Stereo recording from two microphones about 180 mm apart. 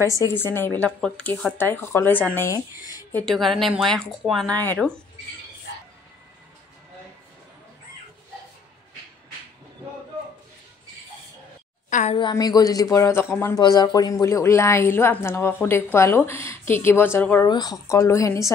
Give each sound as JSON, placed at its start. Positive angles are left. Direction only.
{"t": 0.0, "sound": "speech", "side_deg": 15}
{"t": 11.9, "sound": "a sound", "side_deg": 40}
{"t": 12.2, "sound": "speech", "side_deg": 25}
{"t": 17.5, "sound": "speech", "side_deg": 20}